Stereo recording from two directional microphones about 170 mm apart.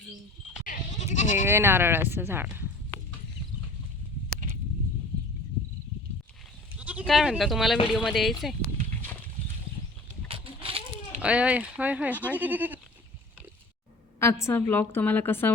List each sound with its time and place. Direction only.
0.6 s goat: 45° left (ahead or behind)
1.5 s speech: 15° right (ahead or behind)
6.7 s sheep: 10° right (ahead or behind)
7.0 s speech: centre (ahead or behind)
10.2 s a sound: 30° right (ahead or behind)
11.2 s speech: 5° right (ahead or behind)
14.4 s a woman's voice: 10° left (ahead or behind)